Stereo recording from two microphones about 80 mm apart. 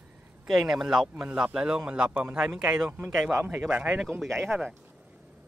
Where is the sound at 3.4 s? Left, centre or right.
Right.